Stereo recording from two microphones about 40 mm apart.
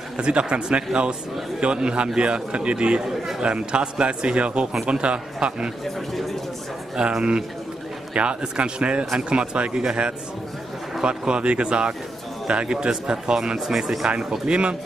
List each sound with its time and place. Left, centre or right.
0.2 s speech: right
3.1 s speech: centre
3.4 s speech: right
7.0 s speech: right
14.5 s speech: right